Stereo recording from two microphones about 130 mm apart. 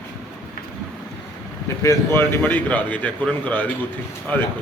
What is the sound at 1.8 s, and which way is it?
A man's voice, 20° left (ahead or behind).